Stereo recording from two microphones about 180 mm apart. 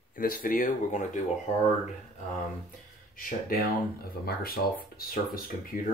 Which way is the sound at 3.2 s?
50° left (ahead or behind).